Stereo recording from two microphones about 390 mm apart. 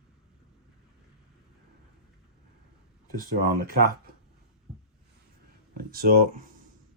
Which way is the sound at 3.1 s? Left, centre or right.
Right.